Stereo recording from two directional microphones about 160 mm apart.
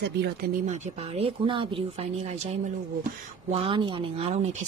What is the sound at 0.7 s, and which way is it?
Speech, 45° right (ahead or behind).